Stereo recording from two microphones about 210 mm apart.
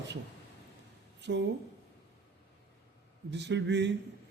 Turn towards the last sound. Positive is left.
turn(degrees=-55)  # may be behind; listen again after turning